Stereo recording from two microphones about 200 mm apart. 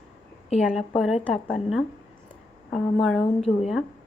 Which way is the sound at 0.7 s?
Centre (ahead or behind).